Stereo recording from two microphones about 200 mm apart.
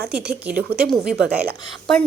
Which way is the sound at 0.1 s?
5° right (ahead or behind).